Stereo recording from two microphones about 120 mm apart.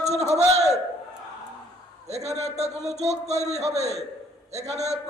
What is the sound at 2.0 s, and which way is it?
A man's voice, 65° right (ahead or behind).